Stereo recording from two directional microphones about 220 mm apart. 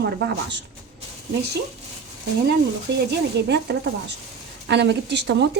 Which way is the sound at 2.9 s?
50° right (ahead or behind).